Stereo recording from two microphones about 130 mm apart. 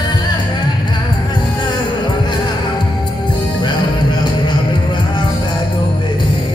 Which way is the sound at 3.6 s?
35° left (ahead or behind).